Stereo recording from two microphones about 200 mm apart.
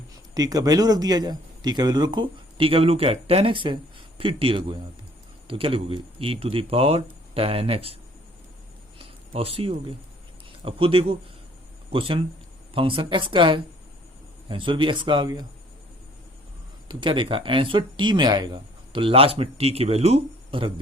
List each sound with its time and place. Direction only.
0.3 s speech: 20° right (ahead or behind)
9.0 s a sound: 30° right (ahead or behind)
10.6 s speech: 25° right (ahead or behind)
16.9 s speech: 25° right (ahead or behind)